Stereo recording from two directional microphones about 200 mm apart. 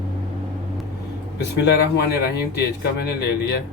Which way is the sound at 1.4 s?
60° left (ahead or behind).